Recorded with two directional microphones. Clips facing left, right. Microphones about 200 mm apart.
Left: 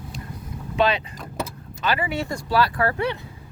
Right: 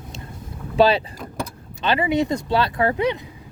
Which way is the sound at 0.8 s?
35° right (ahead or behind).